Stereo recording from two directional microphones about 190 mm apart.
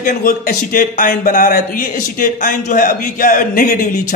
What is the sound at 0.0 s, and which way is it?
Speech, 45° left (ahead or behind).